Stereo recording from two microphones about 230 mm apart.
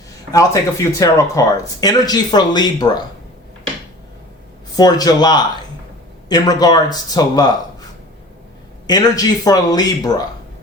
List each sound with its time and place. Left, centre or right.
0.3 s speech: centre
4.8 s speech: centre
8.9 s speech: centre